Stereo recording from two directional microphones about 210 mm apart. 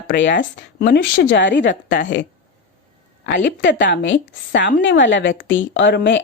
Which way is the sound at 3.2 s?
55° left (ahead or behind).